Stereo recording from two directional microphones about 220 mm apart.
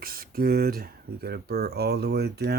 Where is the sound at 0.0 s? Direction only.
40° right (ahead or behind).